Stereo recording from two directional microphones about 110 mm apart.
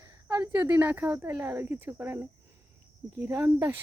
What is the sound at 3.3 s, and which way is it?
Speech, 20° right (ahead or behind).